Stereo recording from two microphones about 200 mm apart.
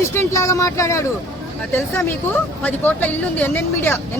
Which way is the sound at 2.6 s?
10° left (ahead or behind).